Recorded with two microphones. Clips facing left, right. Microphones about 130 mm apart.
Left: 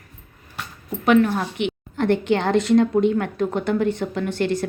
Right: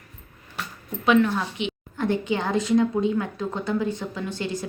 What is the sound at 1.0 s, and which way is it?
A woman's voice, 55° left (ahead or behind).